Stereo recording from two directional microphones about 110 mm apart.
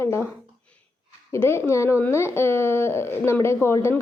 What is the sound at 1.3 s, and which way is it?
A woman's voice, 25° left (ahead or behind).